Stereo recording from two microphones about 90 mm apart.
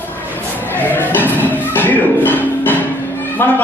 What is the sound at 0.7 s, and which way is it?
Music, 20° left (ahead or behind).